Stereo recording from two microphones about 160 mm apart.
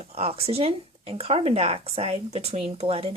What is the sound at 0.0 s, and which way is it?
Speech, 40° right (ahead or behind).